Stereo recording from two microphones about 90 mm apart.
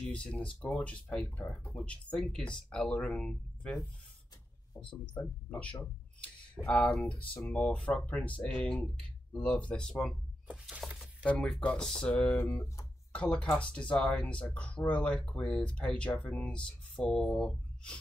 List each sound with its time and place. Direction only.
0.1 s speech: 10° left (ahead or behind)
5.1 s speech: 15° left (ahead or behind)
10.5 s a sound: 10° right (ahead or behind)
11.2 s speech: 10° left (ahead or behind)
12.4 s speech: 30° left (ahead or behind)
13.1 s speech: 10° left (ahead or behind)